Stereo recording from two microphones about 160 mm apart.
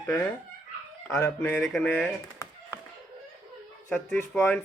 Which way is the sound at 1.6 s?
Centre (ahead or behind).